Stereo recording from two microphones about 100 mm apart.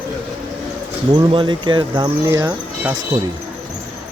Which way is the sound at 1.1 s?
55° right (ahead or behind).